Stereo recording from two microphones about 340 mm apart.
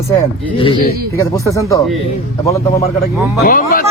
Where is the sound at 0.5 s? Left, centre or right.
Centre.